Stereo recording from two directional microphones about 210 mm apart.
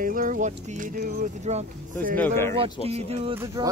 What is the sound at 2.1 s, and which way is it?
Speech, 10° left (ahead or behind).